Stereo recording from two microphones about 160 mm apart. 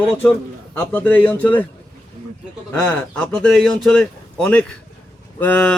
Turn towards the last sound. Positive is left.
turn(degrees=10)  # may be behind; listen again after turning